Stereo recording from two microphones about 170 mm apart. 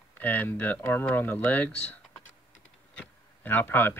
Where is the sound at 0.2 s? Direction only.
10° left (ahead or behind).